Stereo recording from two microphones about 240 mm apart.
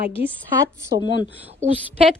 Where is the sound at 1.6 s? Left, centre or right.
Right.